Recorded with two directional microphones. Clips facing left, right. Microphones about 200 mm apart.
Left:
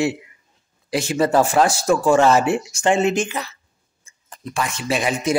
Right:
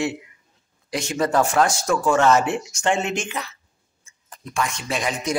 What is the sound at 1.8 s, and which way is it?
Speech, 30° left (ahead or behind).